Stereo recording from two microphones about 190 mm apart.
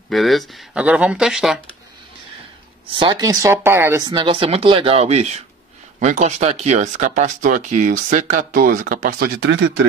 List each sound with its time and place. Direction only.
0.1 s speech: centre (ahead or behind)
2.9 s speech: 25° right (ahead or behind); by 9.3 s 45° right (ahead or behind)
9.4 s speech: 70° right (ahead or behind)